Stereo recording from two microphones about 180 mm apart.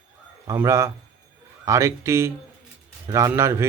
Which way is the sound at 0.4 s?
15° right (ahead or behind).